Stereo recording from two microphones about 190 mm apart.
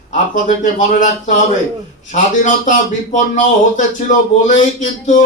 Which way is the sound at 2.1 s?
40° left (ahead or behind).